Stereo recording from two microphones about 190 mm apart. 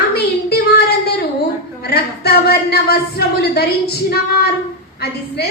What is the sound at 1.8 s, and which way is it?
Speech, 60° left (ahead or behind).